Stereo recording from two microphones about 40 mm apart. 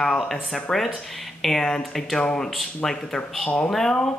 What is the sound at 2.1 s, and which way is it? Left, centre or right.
Speech, centre.